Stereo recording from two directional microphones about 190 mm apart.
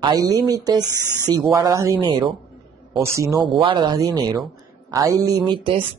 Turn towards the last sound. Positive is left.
turn(degrees=-25)  # may be behind; listen again after turning